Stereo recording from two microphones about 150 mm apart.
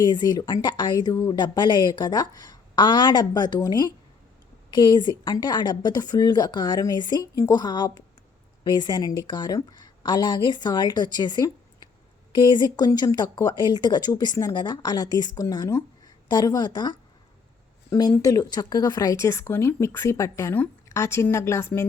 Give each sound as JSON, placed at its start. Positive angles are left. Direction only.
{"t": 0.0, "sound": "speech", "side_deg": 30}
{"t": 18.2, "sound": "speech", "side_deg": 25}